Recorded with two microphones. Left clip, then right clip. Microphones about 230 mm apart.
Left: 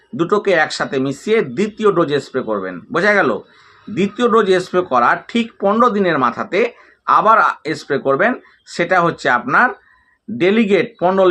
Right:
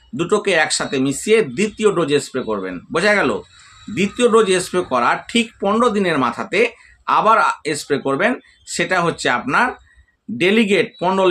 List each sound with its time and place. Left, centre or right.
0.2 s speech: centre
4.4 s speech: centre